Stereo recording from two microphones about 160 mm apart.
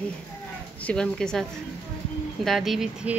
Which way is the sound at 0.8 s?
5° left (ahead or behind).